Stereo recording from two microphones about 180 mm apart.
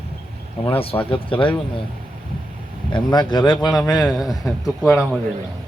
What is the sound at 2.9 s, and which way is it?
Speech, 25° left (ahead or behind).